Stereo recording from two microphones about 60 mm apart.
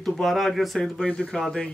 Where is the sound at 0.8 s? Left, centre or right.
Centre.